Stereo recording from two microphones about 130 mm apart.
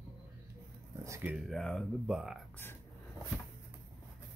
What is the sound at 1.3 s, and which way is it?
Speech, centre (ahead or behind).